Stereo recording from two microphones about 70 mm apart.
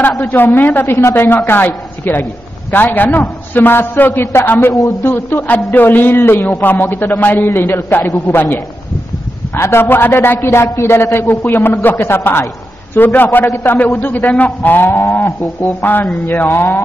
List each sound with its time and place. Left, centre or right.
0.2 s a woman's voice: left
15.8 s a woman's voice: left